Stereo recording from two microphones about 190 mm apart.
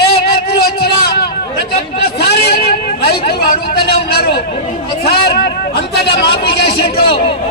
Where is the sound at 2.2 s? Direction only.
60° left (ahead or behind).